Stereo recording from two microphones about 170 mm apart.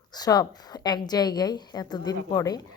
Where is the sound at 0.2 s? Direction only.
25° left (ahead or behind).